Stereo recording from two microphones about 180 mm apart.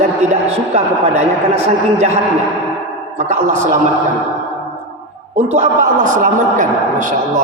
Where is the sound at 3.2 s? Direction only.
40° right (ahead or behind).